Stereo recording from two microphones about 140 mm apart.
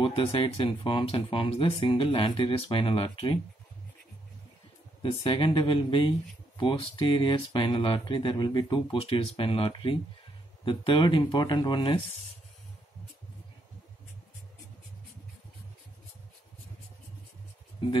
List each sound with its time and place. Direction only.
0.0 s speech: 40° left (ahead or behind)
5.0 s speech: 35° left (ahead or behind)